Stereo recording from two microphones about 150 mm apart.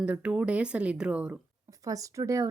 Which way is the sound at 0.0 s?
10° right (ahead or behind).